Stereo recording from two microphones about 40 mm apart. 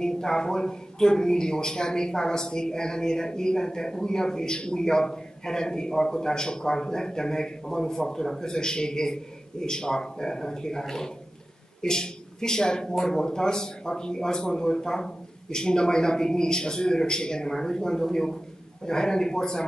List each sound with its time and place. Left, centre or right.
0.0 s a man's voice: centre